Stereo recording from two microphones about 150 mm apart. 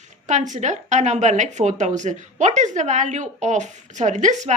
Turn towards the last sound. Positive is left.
turn(degrees=-55)  # may be behind; listen again after turning